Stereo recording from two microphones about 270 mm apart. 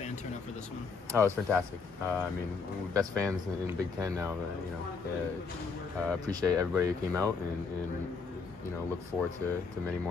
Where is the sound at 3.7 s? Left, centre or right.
Centre.